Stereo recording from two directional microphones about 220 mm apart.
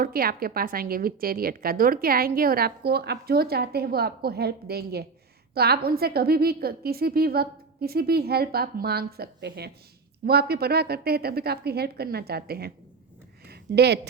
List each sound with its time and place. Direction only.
0.0 s a woman's voice: 40° right (ahead or behind)